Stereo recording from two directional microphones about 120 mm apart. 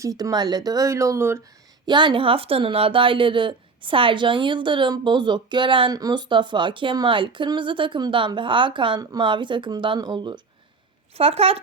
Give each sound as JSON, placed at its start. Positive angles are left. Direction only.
{"t": 0.0, "sound": "speech", "side_deg": -30}
{"t": 1.9, "sound": "speech", "side_deg": -40}
{"t": 11.2, "sound": "speech", "side_deg": -55}